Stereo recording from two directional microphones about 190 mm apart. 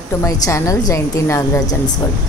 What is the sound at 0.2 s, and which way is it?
A woman's voice, 15° left (ahead or behind).